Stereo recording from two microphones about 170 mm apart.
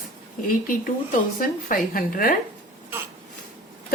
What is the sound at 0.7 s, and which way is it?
Speech, 50° left (ahead or behind).